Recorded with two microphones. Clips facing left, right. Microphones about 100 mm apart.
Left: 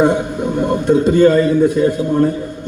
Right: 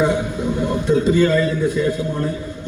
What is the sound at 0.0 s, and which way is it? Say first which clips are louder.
A man's voice: left 4 dB; 55° left (ahead or behind).